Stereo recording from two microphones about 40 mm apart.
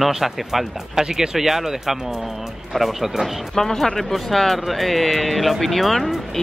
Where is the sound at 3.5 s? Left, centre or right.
Centre.